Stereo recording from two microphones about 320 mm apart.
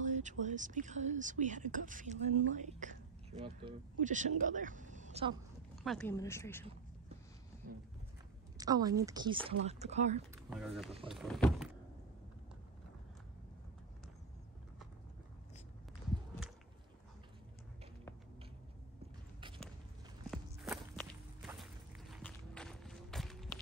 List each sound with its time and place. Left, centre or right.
0.0 s speech: right
5.9 s speech: centre
8.5 s speech: centre
10.3 s speech: centre
20.2 s walk: centre